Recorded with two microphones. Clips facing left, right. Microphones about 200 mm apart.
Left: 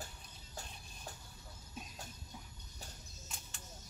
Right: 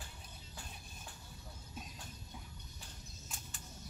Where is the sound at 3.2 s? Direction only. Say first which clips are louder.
Right 1 dB; centre (ahead or behind).